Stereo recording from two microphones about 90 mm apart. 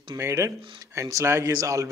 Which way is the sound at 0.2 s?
35° right (ahead or behind).